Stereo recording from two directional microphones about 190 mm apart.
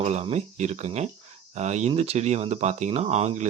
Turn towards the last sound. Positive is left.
turn(degrees=-35)  # may be behind; listen again after turning